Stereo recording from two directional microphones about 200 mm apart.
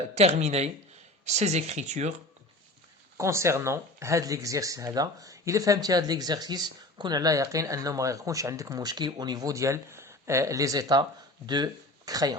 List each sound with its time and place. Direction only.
0.1 s speech: 35° right (ahead or behind)
3.2 s speech: 15° right (ahead or behind)